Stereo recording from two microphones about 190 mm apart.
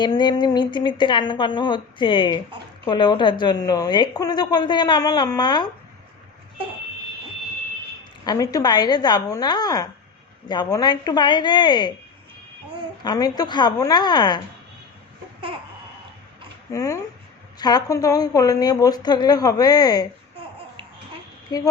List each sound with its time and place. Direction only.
0.0 s a woman's voice: 25° left (ahead or behind)
8.2 s a woman's voice: 20° left (ahead or behind)
13.0 s a woman's voice: 20° left (ahead or behind)
16.7 s a woman's voice: 20° left (ahead or behind)